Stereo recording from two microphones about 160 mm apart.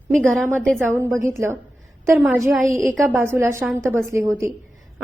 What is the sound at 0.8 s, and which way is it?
Speech, 15° right (ahead or behind).